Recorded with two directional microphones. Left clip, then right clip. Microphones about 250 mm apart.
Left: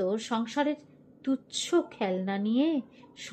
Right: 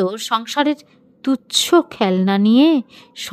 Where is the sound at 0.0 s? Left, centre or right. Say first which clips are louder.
Right 10 dB; right.